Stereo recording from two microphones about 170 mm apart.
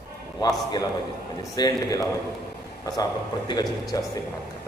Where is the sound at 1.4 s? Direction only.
20° left (ahead or behind).